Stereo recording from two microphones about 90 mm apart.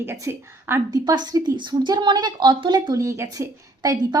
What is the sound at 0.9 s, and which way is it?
A woman's voice, 50° right (ahead or behind).